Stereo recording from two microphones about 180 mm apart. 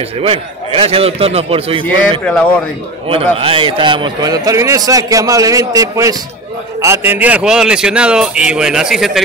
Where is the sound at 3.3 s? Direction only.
30° right (ahead or behind).